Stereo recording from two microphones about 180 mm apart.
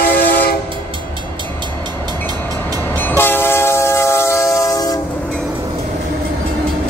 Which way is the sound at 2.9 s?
10° left (ahead or behind).